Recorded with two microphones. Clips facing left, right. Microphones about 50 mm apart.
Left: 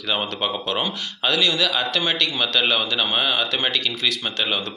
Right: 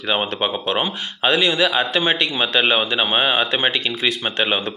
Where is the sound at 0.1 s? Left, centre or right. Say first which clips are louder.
Right 3 dB; right.